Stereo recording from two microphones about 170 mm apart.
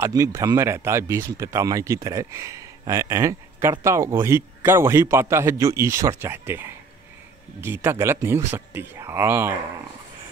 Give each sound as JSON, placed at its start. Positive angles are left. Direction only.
{"t": 0.0, "sound": "speech", "side_deg": -20}